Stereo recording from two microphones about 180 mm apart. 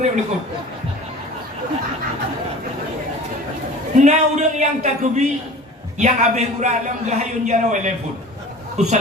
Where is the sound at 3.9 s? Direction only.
40° right (ahead or behind).